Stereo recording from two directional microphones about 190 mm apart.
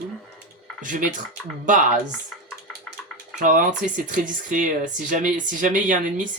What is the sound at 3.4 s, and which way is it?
Speech, 45° right (ahead or behind).